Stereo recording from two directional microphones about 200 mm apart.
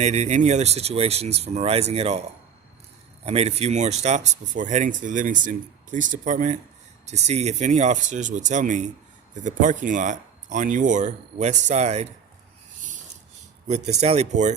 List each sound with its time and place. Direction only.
0.0 s speech: 35° right (ahead or behind)
3.2 s speech: 30° right (ahead or behind)
13.7 s speech: 35° right (ahead or behind)